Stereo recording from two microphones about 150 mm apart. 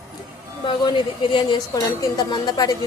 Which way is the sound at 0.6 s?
30° left (ahead or behind).